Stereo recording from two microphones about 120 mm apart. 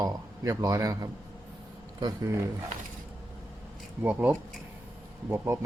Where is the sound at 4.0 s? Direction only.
15° right (ahead or behind).